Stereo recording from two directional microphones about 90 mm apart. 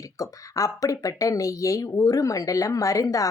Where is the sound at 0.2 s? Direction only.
40° left (ahead or behind).